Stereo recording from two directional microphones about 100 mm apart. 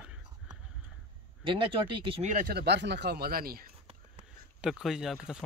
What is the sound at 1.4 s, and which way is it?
Speech, 60° right (ahead or behind).